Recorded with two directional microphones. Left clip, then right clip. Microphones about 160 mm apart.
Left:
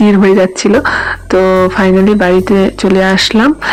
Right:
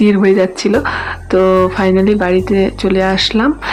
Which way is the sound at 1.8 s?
30° left (ahead or behind).